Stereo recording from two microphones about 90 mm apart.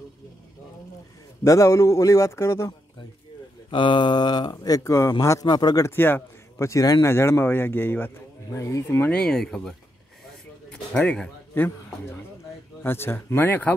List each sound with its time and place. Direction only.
1.4 s a man's voice: 35° left (ahead or behind)
3.7 s a man's voice: 65° left (ahead or behind); by 5.5 s 35° left (ahead or behind)
5.5 s speech: 50° left (ahead or behind)
5.9 s a man's voice: 25° left (ahead or behind)
6.7 s a man's voice: 40° left (ahead or behind)
7.1 s speech: 30° left (ahead or behind)
8.5 s a man's voice: 35° left (ahead or behind)
9.1 s speech: 5° left (ahead or behind)
10.2 s a sound: 5° left (ahead or behind)
11.0 s speech: 15° left (ahead or behind)